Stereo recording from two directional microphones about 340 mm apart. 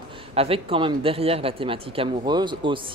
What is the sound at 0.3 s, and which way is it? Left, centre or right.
Speech, centre.